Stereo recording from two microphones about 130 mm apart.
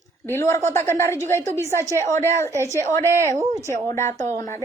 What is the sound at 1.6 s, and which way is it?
A woman's voice, 20° left (ahead or behind).